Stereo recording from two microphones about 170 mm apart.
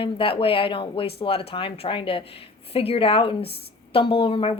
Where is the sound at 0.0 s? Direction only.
30° left (ahead or behind).